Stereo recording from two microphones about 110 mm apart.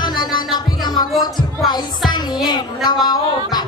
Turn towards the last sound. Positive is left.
turn(degrees=40)  # may be behind; listen again after turning